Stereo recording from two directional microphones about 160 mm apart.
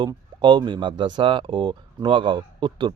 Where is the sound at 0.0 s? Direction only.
30° right (ahead or behind).